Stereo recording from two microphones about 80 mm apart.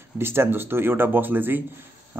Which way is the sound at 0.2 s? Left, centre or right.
Right.